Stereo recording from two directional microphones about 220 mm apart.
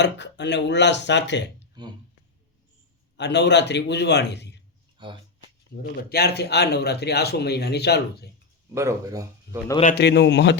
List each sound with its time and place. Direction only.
0.0 s a man's voice: 55° left (ahead or behind)
3.2 s a man's voice: 50° left (ahead or behind)
4.9 s a sound: 20° right (ahead or behind)
6.0 s a man's voice: 45° left (ahead or behind)
8.7 s speech: 15° right (ahead or behind)
9.8 s a man's voice: 50° left (ahead or behind)